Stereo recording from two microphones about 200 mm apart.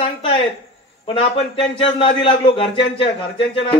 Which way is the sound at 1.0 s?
30° left (ahead or behind).